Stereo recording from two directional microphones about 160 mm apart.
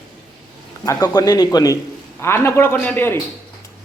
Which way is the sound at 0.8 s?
20° left (ahead or behind).